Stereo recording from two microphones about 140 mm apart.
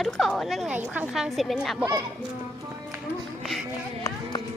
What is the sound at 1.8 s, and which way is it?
Speech, 25° right (ahead or behind).